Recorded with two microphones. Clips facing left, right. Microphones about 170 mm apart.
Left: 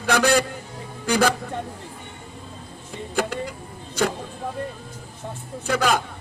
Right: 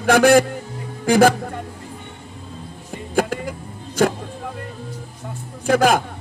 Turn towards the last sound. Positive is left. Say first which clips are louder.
# right 6 dB
turn(degrees=-50)  # may be behind; listen again after turning